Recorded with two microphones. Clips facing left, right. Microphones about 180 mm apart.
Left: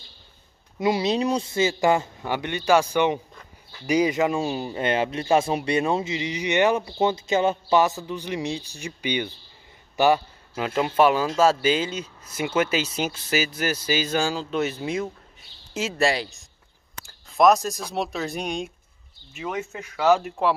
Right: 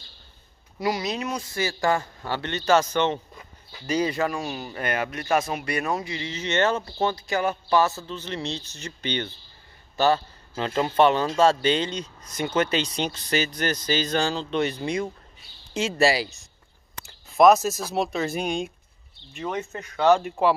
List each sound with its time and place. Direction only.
0.7 s a man's voice: 25° left (ahead or behind); by 20.5 s centre (ahead or behind)